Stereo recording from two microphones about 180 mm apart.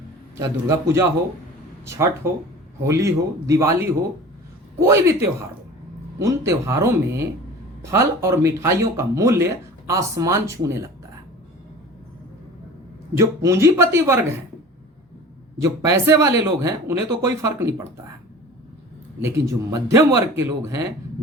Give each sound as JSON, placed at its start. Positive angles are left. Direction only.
{"t": 0.3, "sound": "speech", "side_deg": -15}
{"t": 13.1, "sound": "speech", "side_deg": -15}
{"t": 15.6, "sound": "speech", "side_deg": -15}
{"t": 19.2, "sound": "speech", "side_deg": -15}